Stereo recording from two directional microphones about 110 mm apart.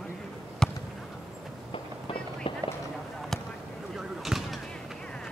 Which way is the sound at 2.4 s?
55° left (ahead or behind).